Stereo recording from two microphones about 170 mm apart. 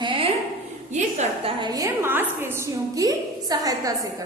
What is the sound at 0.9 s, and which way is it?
A woman's voice, 45° right (ahead or behind).